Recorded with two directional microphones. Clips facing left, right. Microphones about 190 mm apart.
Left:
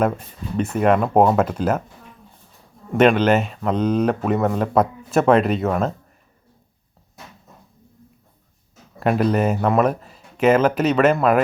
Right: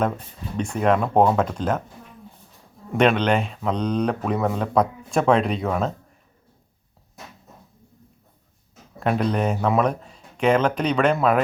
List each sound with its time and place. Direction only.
0.5 s speech: 5° left (ahead or behind)
2.9 s speech: centre (ahead or behind)
9.0 s speech: 5° left (ahead or behind)